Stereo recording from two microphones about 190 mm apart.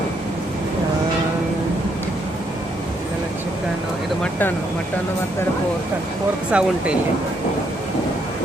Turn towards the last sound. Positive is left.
turn(degrees=-5)  # may be behind; listen again after turning